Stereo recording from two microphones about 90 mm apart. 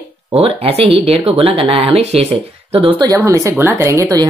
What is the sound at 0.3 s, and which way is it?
Speech, 90° right.